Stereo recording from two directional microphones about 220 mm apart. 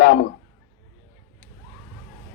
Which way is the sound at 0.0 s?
40° left (ahead or behind).